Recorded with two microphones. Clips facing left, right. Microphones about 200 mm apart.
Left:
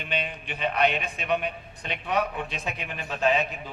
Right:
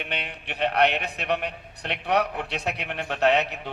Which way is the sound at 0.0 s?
70° right (ahead or behind).